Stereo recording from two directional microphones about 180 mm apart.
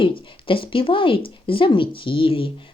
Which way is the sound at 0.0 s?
30° left (ahead or behind).